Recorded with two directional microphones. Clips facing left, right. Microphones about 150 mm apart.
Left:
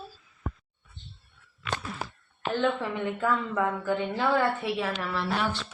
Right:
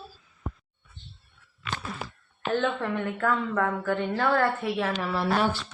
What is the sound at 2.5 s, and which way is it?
A woman's voice, 5° left (ahead or behind).